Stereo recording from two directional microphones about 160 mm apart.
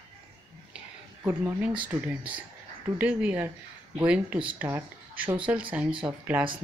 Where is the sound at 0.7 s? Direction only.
10° right (ahead or behind).